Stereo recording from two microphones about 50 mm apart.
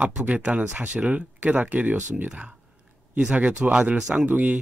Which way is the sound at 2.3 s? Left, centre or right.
Centre.